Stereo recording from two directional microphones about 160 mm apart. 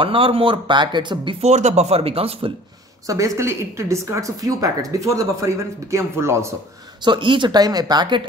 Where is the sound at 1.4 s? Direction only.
45° right (ahead or behind).